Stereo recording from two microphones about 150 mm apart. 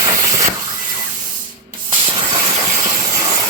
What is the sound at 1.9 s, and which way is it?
Hiss, 30° right (ahead or behind).